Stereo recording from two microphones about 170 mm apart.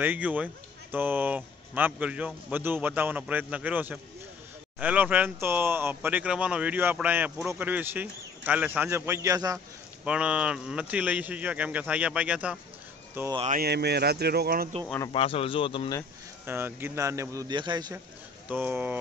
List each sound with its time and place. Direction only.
0.0 s speech: 10° right (ahead or behind)
10.0 s speech: 5° right (ahead or behind)
13.5 s speech: 65° right (ahead or behind)
15.1 s speech: 35° left (ahead or behind)
16.4 s speech: 10° right (ahead or behind)
18.5 s speech: 10° right (ahead or behind)